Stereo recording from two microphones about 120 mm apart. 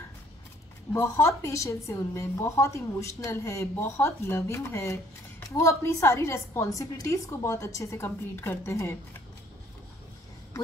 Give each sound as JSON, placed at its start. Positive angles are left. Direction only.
{"t": 0.9, "sound": "a woman's voice", "side_deg": 20}